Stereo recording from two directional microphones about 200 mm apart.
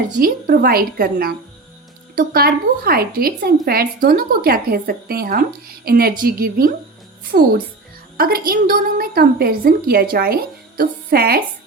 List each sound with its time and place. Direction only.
0.2 s a woman's voice: 45° right (ahead or behind)